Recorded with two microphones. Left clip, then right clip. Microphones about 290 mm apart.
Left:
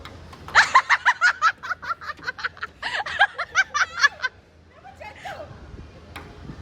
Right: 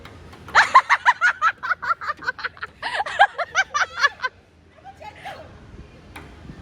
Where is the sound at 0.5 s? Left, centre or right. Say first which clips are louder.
Right 2 dB; centre.